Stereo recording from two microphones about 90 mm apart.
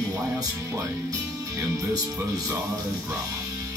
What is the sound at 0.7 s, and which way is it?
Speech, 35° right (ahead or behind).